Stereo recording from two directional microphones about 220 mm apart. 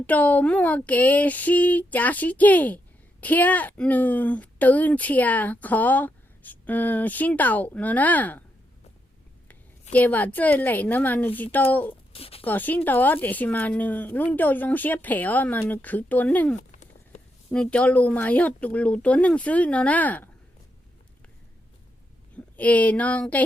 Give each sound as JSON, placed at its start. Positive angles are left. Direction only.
{"t": 0.0, "sound": "speech", "side_deg": 5}
{"t": 9.9, "sound": "speech", "side_deg": 5}
{"t": 12.1, "sound": "speech", "side_deg": 25}
{"t": 12.5, "sound": "speech", "side_deg": 10}
{"t": 16.7, "sound": "a sound", "side_deg": 35}
{"t": 17.5, "sound": "speech", "side_deg": 5}
{"t": 22.5, "sound": "speech", "side_deg": 5}